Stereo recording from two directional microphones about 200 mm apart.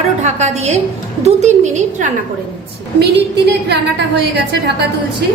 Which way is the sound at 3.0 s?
55° right (ahead or behind).